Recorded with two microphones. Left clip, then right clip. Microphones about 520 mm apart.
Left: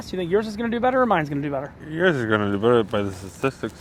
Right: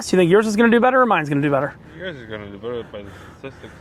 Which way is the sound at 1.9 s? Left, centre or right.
Left.